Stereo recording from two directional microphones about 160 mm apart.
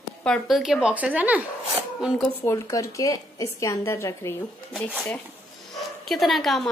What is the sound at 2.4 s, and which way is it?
A woman's voice, 20° left (ahead or behind).